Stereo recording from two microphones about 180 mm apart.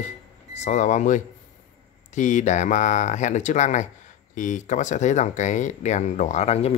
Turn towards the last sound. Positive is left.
turn(degrees=35)  # may be behind; listen again after turning